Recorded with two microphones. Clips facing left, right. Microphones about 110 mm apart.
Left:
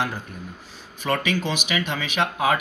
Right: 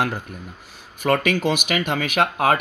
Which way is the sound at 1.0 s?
55° right (ahead or behind).